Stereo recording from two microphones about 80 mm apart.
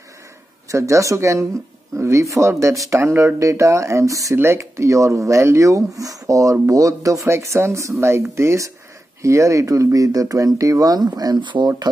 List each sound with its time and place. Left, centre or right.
0.7 s speech: right
11.3 s speech: right